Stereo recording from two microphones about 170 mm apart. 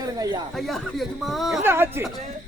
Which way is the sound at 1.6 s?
15° right (ahead or behind).